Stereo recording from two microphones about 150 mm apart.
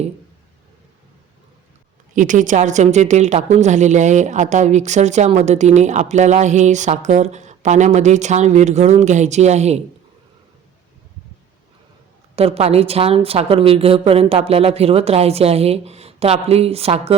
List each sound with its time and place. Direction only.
2.1 s a woman's voice: 60° right (ahead or behind)
12.4 s a woman's voice: 45° right (ahead or behind)